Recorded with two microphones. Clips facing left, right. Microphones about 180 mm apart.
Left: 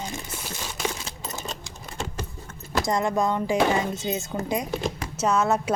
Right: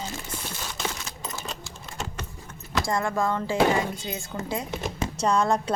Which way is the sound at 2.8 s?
20° left (ahead or behind).